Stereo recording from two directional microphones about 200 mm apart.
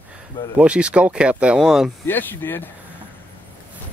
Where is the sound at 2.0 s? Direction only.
10° left (ahead or behind).